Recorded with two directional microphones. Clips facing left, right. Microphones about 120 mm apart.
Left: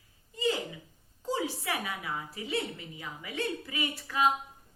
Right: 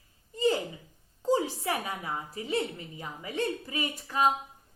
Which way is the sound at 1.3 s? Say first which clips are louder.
Right 5 dB; 35° right (ahead or behind).